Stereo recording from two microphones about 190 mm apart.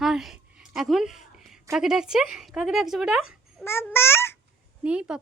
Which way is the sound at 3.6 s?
10° left (ahead or behind).